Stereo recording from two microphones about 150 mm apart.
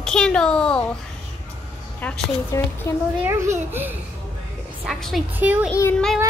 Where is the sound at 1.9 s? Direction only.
10° left (ahead or behind).